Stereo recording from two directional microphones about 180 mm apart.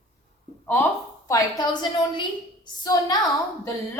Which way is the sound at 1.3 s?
25° left (ahead or behind).